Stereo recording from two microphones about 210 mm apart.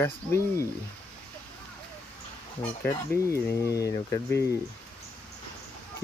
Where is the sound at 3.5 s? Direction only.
50° left (ahead or behind).